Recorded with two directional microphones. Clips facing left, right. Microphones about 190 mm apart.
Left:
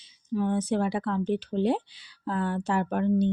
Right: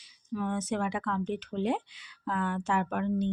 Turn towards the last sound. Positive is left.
turn(degrees=35)  # may be behind; listen again after turning